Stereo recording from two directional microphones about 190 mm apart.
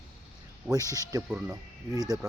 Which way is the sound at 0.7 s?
20° right (ahead or behind).